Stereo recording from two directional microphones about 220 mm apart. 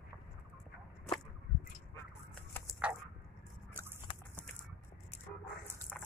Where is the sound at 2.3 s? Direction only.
10° left (ahead or behind).